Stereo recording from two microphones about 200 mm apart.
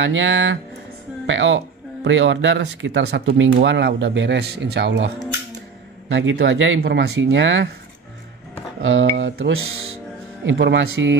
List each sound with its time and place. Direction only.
0.0 s a woman's voice: 70° right (ahead or behind)
8.8 s speech: 70° right (ahead or behind)